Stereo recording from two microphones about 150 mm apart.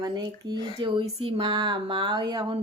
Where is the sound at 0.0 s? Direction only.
25° right (ahead or behind).